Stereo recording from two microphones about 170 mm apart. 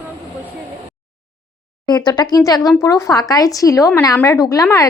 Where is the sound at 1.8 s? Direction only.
25° left (ahead or behind).